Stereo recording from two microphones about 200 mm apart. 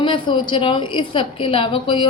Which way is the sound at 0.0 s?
25° left (ahead or behind).